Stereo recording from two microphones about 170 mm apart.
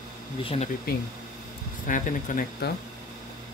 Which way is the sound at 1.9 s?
50° left (ahead or behind).